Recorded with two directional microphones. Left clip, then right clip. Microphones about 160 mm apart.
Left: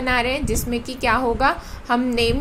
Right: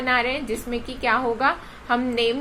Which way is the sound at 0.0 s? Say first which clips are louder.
Left 1 dB; 35° left (ahead or behind).